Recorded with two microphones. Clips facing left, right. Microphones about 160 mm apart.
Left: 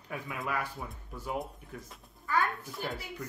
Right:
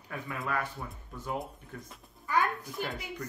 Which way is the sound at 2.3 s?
15° right (ahead or behind).